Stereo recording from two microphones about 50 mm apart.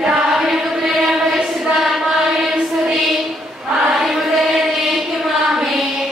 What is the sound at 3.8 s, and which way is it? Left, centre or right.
Chant, centre.